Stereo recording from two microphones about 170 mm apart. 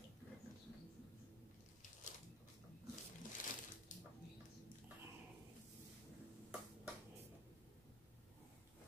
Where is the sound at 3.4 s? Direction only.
55° left (ahead or behind).